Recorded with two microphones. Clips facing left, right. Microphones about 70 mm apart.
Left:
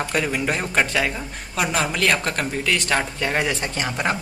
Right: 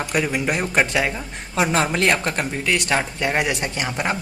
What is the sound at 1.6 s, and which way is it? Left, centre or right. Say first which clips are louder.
Speech: right 3 dB; right.